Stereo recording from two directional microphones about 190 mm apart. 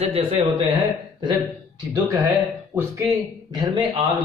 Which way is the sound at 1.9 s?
15° right (ahead or behind).